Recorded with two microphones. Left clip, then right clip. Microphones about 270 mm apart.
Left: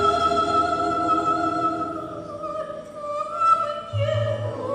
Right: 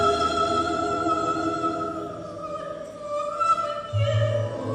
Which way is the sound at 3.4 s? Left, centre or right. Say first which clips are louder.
Left 4 dB; left.